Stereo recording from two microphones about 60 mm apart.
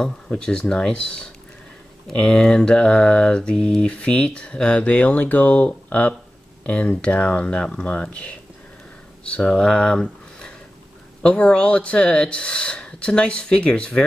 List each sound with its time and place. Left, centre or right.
0.0 s speech: centre
2.1 s mantra: centre
9.2 s speech: centre